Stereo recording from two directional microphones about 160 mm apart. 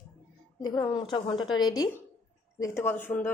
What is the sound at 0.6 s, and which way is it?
A woman's voice, 25° left (ahead or behind).